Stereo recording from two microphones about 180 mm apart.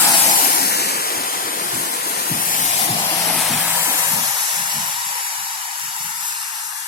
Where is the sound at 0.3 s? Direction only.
55° left (ahead or behind).